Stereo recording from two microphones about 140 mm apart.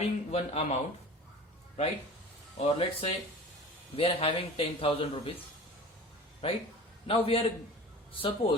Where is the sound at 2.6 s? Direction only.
45° left (ahead or behind).